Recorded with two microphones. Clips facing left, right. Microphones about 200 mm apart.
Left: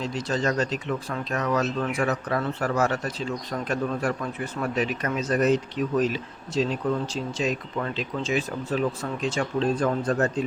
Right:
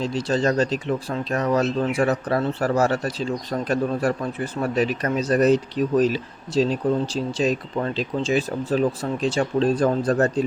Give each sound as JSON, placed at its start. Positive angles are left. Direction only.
{"t": 0.0, "sound": "speech", "side_deg": -30}